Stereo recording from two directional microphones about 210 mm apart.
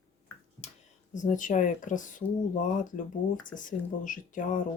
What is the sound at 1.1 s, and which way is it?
Speech, 35° left (ahead or behind).